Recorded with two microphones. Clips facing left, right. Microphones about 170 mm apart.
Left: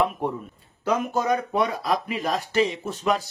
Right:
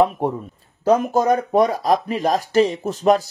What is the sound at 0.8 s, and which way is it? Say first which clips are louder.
Speech: right 7 dB; 40° right (ahead or behind).